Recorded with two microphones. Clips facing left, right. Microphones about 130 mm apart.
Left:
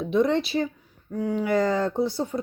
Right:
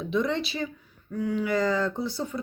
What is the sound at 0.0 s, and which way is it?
Speech, 50° left (ahead or behind).